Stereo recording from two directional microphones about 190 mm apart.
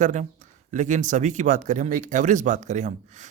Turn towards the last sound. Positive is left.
turn(degrees=-40)  # may be behind; listen again after turning